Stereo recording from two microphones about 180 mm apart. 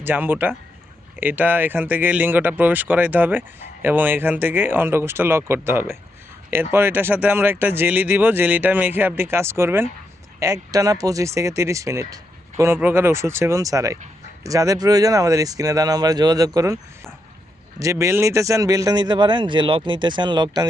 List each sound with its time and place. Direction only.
0.0 s speech: 10° right (ahead or behind)
17.7 s speech: 15° right (ahead or behind)